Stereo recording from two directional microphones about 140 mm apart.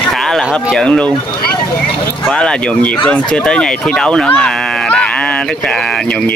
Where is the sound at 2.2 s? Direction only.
10° left (ahead or behind).